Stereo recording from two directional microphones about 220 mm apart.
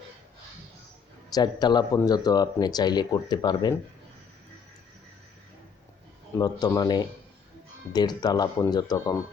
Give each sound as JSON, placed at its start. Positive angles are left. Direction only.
{"t": 1.3, "sound": "speech", "side_deg": 20}
{"t": 6.4, "sound": "speech", "side_deg": 15}